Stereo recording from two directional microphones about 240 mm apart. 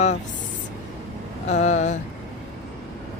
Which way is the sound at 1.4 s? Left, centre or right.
Left.